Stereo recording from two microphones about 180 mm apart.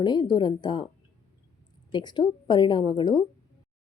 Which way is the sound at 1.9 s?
25° left (ahead or behind).